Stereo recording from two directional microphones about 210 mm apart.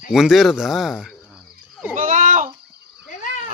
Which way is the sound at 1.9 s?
40° right (ahead or behind).